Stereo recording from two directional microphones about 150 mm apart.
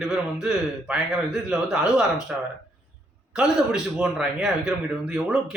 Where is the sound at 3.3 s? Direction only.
5° right (ahead or behind).